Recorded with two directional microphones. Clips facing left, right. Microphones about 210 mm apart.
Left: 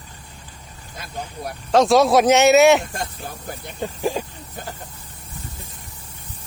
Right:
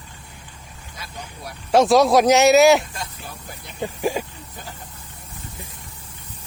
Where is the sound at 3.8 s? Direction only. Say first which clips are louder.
Even; 10° right (ahead or behind).